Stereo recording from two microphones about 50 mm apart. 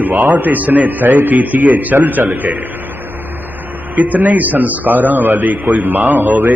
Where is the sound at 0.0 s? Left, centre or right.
Right.